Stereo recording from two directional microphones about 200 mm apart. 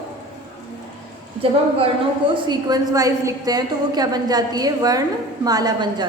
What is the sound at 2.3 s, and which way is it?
A woman's voice, 20° right (ahead or behind).